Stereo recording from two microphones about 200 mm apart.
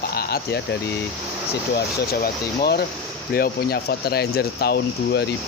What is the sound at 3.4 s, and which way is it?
Speech, 50° left (ahead or behind).